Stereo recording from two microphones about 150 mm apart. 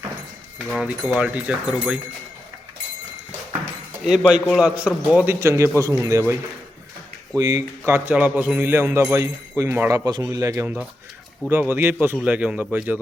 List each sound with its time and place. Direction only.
0.7 s speech: 5° right (ahead or behind)
4.0 s speech: 5° right (ahead or behind); by 6.3 s 20° right (ahead or behind)
7.3 s speech: 20° right (ahead or behind)